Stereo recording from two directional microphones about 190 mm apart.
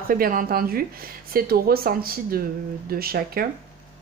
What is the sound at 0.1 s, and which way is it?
A woman's voice, 45° right (ahead or behind).